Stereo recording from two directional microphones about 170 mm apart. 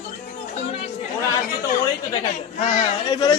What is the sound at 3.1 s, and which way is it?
Speech, 25° left (ahead or behind).